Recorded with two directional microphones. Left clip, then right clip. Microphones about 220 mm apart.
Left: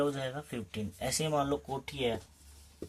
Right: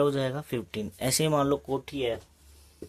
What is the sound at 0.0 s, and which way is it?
Speech, 50° right (ahead or behind).